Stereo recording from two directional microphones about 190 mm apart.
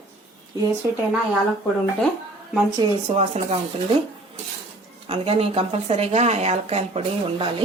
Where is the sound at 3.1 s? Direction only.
35° right (ahead or behind).